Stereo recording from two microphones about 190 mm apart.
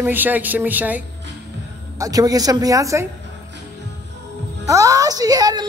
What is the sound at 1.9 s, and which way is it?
A woman's voice, 20° right (ahead or behind).